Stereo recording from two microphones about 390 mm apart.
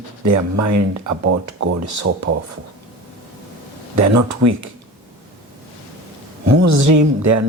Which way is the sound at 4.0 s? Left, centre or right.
Right.